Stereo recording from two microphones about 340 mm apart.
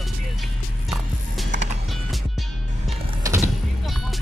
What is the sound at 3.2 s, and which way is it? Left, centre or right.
Music, centre.